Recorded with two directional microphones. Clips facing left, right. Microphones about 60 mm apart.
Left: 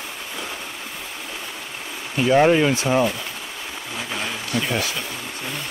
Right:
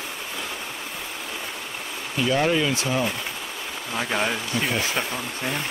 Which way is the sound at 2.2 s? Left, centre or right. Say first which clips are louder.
Left 6 dB; left.